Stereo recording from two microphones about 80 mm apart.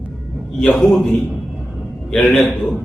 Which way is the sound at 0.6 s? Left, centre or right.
Centre.